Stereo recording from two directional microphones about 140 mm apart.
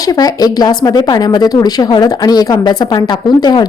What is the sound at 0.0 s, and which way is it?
Speech, 25° left (ahead or behind).